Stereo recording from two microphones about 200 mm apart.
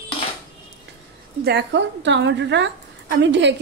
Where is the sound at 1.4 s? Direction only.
60° right (ahead or behind).